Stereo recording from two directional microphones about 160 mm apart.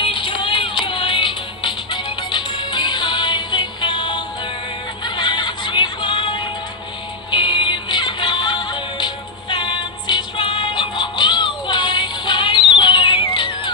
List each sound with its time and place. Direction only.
0.0 s music: 30° left (ahead or behind)